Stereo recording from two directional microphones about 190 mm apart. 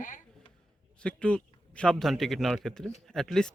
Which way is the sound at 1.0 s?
5° left (ahead or behind).